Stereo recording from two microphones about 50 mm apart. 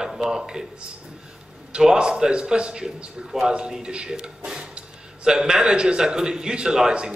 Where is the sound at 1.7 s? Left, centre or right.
Centre.